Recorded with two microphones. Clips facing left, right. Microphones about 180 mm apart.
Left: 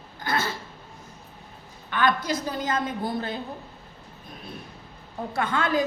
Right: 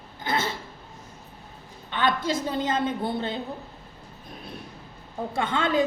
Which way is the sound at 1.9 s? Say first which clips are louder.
Left 1 dB; 25° right (ahead or behind).